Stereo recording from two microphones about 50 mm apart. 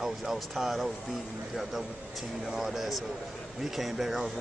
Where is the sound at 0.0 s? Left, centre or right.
Centre.